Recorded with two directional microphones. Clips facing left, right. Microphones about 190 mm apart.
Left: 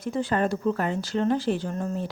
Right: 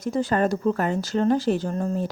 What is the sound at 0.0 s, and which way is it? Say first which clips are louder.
A woman's voice: right 3 dB; 40° right (ahead or behind).